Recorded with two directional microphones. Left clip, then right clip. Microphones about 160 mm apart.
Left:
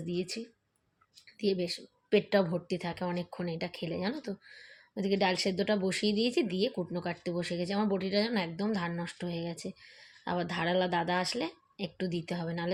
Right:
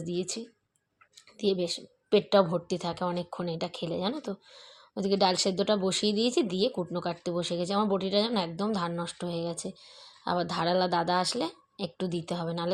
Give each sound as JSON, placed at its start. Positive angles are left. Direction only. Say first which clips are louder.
{"t": 1.4, "sound": "speech", "louder": "right 3 dB", "side_deg": -25}